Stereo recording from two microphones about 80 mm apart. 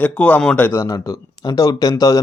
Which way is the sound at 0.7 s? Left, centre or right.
Left.